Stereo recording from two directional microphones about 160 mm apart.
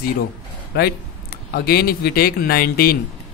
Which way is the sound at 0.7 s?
75° left (ahead or behind).